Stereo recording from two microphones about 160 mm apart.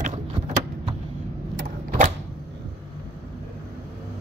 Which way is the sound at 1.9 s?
50° right (ahead or behind).